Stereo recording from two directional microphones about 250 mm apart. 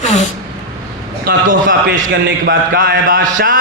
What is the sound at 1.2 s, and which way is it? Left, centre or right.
A man's voice, right.